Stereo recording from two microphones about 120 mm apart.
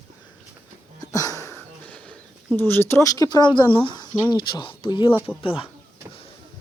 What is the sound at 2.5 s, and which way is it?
Speech, 20° left (ahead or behind).